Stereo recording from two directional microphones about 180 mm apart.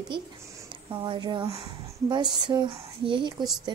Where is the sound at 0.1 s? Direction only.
25° right (ahead or behind).